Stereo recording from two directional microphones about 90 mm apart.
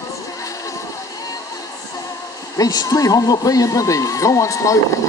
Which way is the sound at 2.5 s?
40° left (ahead or behind).